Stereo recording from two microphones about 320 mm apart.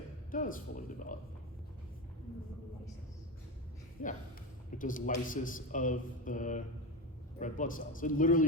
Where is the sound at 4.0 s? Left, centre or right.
Left.